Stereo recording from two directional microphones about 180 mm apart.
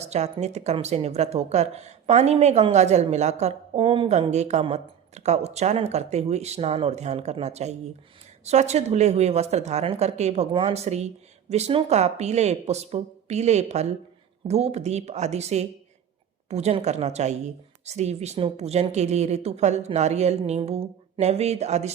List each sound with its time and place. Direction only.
0.0 s speech: 35° right (ahead or behind)